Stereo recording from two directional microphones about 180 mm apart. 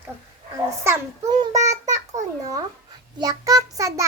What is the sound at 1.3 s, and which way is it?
A child's voice, 20° right (ahead or behind).